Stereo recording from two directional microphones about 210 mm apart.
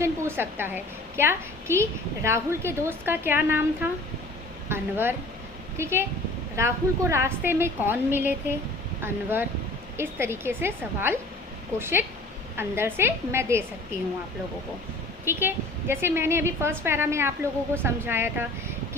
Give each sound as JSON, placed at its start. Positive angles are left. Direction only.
{"t": 0.0, "sound": "a woman's voice", "side_deg": -10}
{"t": 15.2, "sound": "a woman's voice", "side_deg": -10}